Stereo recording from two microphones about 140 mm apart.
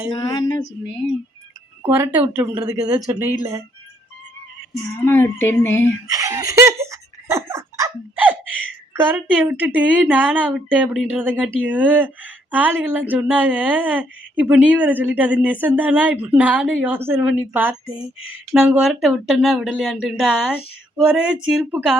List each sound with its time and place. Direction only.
0.1 s a woman's voice: 30° left (ahead or behind)
1.8 s speech: 20° right (ahead or behind)
5.0 s speech: 15° left (ahead or behind)
6.1 s giggle: 25° right (ahead or behind)
8.9 s speech: 15° right (ahead or behind)